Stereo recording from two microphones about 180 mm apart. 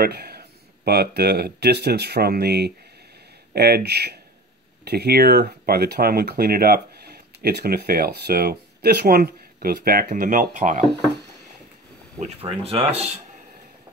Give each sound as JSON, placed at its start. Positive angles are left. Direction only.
{"t": 0.0, "sound": "speech", "side_deg": -60}
{"t": 10.6, "sound": "speech", "side_deg": -35}
{"t": 11.1, "sound": "a sound", "side_deg": -70}
{"t": 12.2, "sound": "speech", "side_deg": -35}